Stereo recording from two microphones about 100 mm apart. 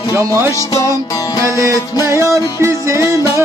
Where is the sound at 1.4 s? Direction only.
30° right (ahead or behind).